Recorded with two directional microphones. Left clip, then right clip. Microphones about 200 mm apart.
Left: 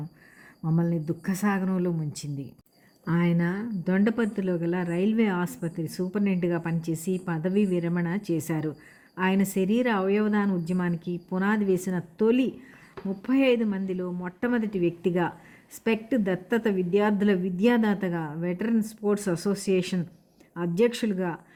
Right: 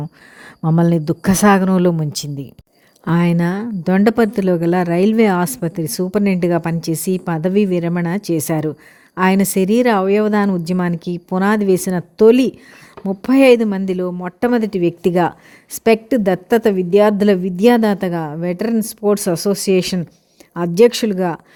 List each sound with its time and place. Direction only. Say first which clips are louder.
0.4 s speech: right 13 dB; 40° right (ahead or behind)